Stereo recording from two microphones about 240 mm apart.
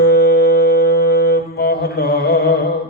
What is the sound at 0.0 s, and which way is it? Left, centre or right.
Music, left.